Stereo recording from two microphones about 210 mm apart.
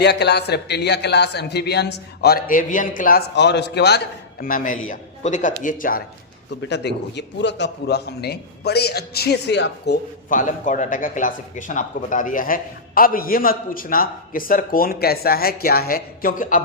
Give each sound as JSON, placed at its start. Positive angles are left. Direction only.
{"t": 0.0, "sound": "a man's voice", "side_deg": 55}
{"t": 6.7, "sound": "a man's voice", "side_deg": 55}